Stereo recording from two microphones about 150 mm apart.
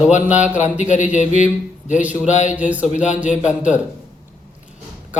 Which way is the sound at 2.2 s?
50° left (ahead or behind).